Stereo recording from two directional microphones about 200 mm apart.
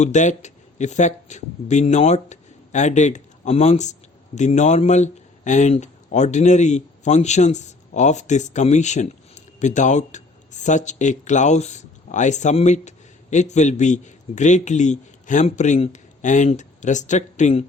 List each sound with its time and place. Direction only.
0.0 s a man's voice: 35° left (ahead or behind)